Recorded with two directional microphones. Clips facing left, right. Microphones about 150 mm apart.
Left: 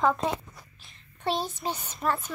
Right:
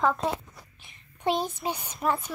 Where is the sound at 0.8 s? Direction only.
15° right (ahead or behind).